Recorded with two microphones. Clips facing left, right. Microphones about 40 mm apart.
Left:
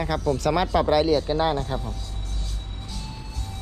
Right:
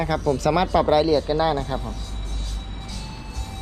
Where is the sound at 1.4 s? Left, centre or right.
Right.